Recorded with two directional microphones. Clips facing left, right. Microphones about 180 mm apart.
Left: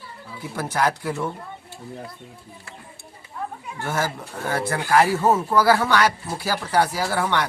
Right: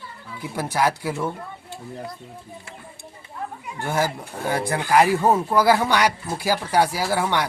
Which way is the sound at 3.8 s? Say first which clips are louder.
Right 2 dB; 15° right (ahead or behind).